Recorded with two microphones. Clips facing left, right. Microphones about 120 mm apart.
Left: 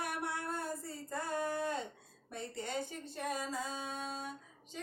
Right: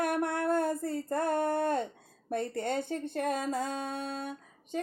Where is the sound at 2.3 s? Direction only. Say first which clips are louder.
Right 9 dB; 55° right (ahead or behind).